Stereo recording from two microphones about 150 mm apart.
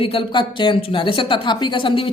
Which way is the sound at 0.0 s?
35° left (ahead or behind).